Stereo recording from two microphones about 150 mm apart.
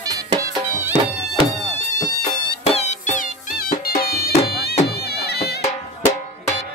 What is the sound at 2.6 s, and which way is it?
Music, 45° left (ahead or behind).